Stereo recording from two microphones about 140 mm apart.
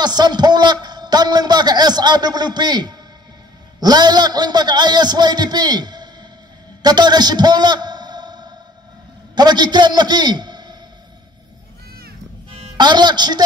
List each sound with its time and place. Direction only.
0.0 s a man's voice: 30° right (ahead or behind)
6.8 s a sound: 30° right (ahead or behind)
9.3 s a man's voice: 30° right (ahead or behind)
12.7 s a man's voice: 30° right (ahead or behind)